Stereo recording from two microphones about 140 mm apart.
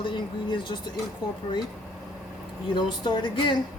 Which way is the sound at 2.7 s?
35° left (ahead or behind).